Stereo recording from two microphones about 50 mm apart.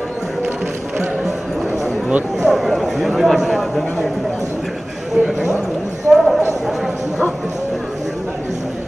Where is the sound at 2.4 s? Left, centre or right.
Centre.